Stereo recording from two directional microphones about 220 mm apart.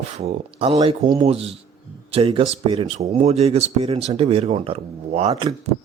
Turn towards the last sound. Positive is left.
turn(degrees=-25)  # may be behind; listen again after turning